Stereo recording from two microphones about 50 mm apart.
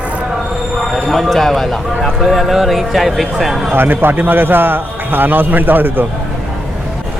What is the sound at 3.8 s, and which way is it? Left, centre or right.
A man's voice, right.